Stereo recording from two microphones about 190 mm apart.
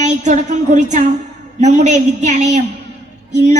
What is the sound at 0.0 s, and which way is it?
A woman's voice, 40° right (ahead or behind).